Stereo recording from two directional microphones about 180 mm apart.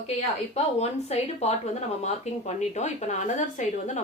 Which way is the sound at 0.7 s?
35° left (ahead or behind).